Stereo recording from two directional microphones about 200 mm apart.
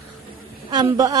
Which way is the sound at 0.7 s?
20° right (ahead or behind).